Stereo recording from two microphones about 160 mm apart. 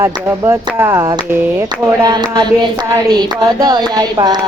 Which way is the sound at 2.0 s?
25° right (ahead or behind).